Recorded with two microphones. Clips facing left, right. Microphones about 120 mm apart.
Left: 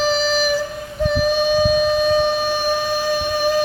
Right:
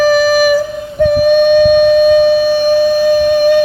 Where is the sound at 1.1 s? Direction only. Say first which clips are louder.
Right 9 dB; 55° right (ahead or behind).